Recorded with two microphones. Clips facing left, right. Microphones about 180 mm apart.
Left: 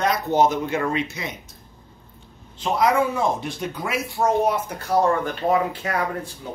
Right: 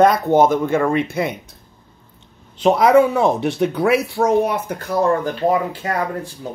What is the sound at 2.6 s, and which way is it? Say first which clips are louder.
Speech: right 8 dB; 65° right (ahead or behind).